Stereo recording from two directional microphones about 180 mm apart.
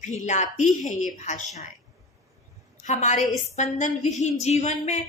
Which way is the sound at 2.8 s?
40° left (ahead or behind).